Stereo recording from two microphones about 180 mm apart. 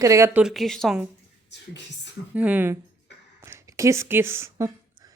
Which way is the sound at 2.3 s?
10° right (ahead or behind).